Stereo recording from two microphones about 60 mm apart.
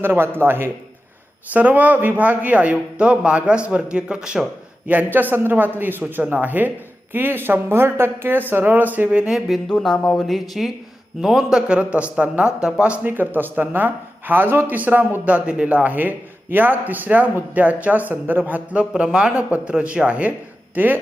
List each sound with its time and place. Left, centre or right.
0.0 s speech: right
1.5 s a man's voice: right
5.1 s speech: right
9.0 s a man's voice: centre
9.6 s speech: centre
10.2 s a man's voice: centre; by 13.1 s right
13.1 s speech: right
18.8 s a man's voice: centre
20.7 s speech: right